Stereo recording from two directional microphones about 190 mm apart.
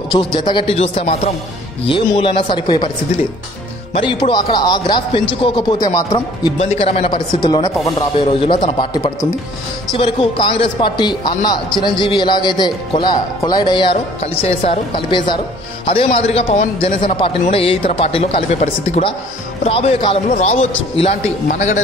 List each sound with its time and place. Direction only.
0.1 s speech: 25° left (ahead or behind)
3.9 s speech: 25° left (ahead or behind)
6.6 s speech: 35° left (ahead or behind)
7.4 s speech: 20° left (ahead or behind); by 21.8 s 40° left (ahead or behind)